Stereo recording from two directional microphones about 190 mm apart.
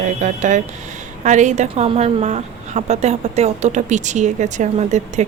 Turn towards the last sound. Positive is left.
turn(degrees=-40)  # may be behind; listen again after turning